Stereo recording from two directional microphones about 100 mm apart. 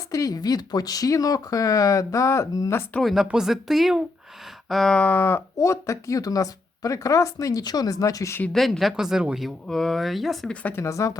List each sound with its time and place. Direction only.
0.1 s speech: 35° left (ahead or behind)
3.0 s speech: centre (ahead or behind)
4.7 s a sound: 5° left (ahead or behind)
5.5 s speech: 30° left (ahead or behind)
8.5 s speech: centre (ahead or behind)
10.5 s a sound: 15° left (ahead or behind)
10.8 s speech: 30° left (ahead or behind)